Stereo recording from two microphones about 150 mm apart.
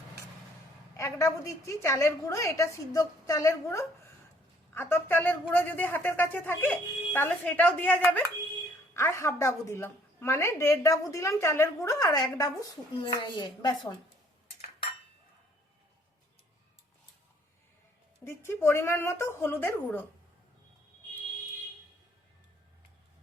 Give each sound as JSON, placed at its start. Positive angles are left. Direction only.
{"t": 0.9, "sound": "a woman's voice", "side_deg": 20}
{"t": 18.3, "sound": "a woman's voice", "side_deg": 15}